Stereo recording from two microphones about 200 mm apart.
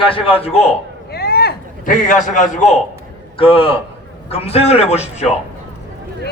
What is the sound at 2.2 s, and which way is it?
A man's voice, 40° left (ahead or behind).